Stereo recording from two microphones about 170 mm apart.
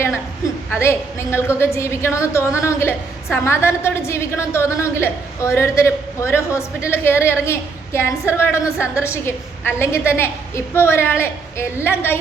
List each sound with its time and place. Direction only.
0.7 s a woman's voice: 15° left (ahead or behind)